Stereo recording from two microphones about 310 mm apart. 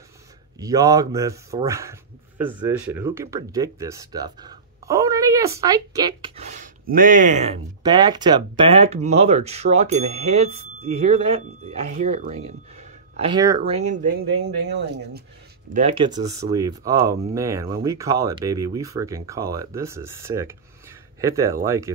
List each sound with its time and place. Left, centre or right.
0.6 s a man's voice: centre; by 15.2 s right
15.7 s a man's voice: centre